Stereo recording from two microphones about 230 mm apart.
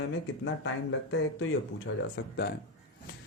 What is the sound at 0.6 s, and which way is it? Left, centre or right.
A man's voice, left.